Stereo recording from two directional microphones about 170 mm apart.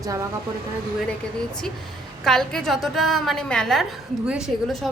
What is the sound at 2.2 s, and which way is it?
A woman's voice, 5° left (ahead or behind).